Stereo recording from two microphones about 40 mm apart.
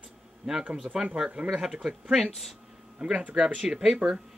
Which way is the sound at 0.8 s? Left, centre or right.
Right.